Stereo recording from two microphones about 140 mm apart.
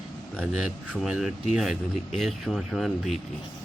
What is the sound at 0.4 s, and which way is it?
Speech, 5° right (ahead or behind).